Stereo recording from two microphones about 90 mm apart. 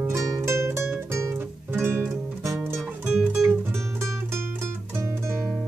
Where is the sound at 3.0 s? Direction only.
20° right (ahead or behind).